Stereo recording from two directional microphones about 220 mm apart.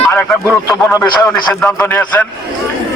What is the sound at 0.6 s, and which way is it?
Speech, 15° left (ahead or behind).